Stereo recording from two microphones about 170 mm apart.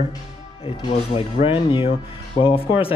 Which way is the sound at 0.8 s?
30° left (ahead or behind).